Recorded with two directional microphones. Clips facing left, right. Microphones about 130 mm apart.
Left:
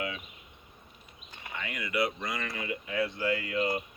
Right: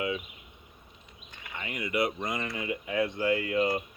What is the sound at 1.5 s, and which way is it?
Speech, 25° right (ahead or behind).